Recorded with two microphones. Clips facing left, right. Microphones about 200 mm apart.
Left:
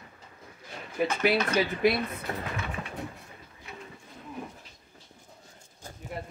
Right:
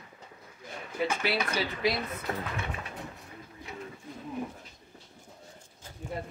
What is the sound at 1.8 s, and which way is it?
Speech, 55° left (ahead or behind).